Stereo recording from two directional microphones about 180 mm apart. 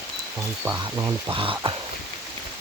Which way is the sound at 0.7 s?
20° right (ahead or behind).